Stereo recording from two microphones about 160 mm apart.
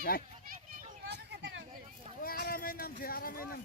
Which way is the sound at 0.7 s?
90° right.